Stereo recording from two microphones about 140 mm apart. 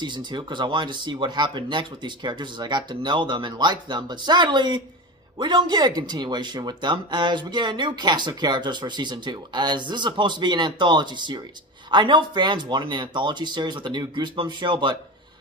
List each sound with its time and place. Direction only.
0.0 s speech: 35° right (ahead or behind)